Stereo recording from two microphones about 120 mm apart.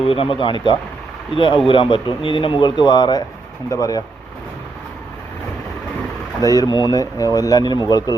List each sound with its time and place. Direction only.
0.0 s a man's voice: 50° left (ahead or behind); by 4.0 s 30° left (ahead or behind)
6.4 s speech: 30° left (ahead or behind)